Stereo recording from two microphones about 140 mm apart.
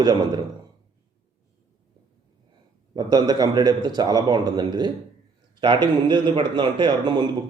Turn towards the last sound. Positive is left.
turn(degrees=-35)  # may be behind; listen again after turning